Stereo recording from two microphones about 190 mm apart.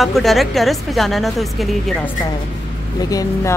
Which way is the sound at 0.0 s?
Centre (ahead or behind).